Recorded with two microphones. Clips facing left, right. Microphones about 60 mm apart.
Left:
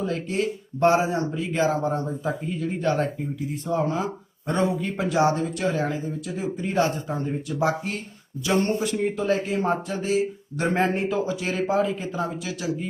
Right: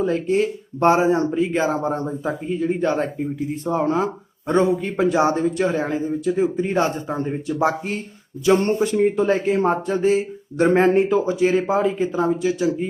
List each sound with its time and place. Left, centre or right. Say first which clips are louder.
0.0 s speech: right 6 dB; right
3.7 s speech: right 4 dB; right
4.4 s speech: right 6 dB; right